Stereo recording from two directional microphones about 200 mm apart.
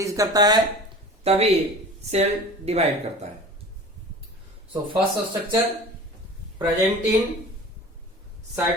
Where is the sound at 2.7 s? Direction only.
30° right (ahead or behind).